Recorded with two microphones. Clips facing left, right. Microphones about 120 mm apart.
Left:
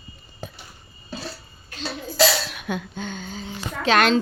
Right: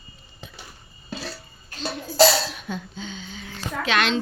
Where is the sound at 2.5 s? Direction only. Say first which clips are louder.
Left 3 dB; 70° left (ahead or behind); by 4.2 s 40° left (ahead or behind).